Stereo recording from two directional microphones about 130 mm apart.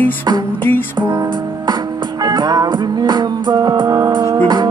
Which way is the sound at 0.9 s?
20° right (ahead or behind).